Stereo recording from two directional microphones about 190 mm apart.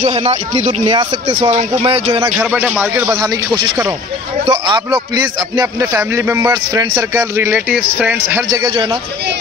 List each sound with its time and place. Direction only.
0.0 s speech: 35° right (ahead or behind)
2.2 s a man's voice: 10° right (ahead or behind)
8.5 s a man's voice: 20° right (ahead or behind)